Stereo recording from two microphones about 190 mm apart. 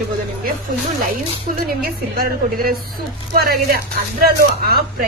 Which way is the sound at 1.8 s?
50° right (ahead or behind).